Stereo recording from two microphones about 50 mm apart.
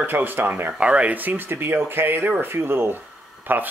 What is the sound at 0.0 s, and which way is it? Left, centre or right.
Speech, right.